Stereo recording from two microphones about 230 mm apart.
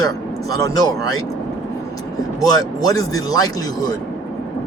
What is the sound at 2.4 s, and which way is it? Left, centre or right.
Speech, centre.